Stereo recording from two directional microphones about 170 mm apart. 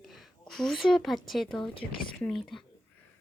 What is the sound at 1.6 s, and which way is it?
Speech, 30° left (ahead or behind).